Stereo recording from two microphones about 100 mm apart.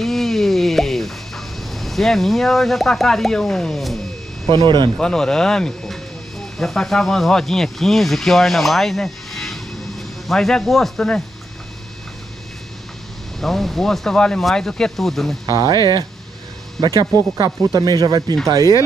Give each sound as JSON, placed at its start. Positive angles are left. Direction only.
{"t": 0.0, "sound": "a sound", "side_deg": 0}
{"t": 4.6, "sound": "speech", "side_deg": -50}
{"t": 4.9, "sound": "speech", "side_deg": 5}
{"t": 13.4, "sound": "speech", "side_deg": 0}
{"t": 15.4, "sound": "speech", "side_deg": -45}